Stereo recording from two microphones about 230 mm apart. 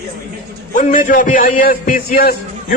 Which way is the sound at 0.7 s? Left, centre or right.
Left.